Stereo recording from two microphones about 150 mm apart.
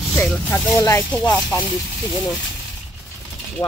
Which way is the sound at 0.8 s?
15° left (ahead or behind).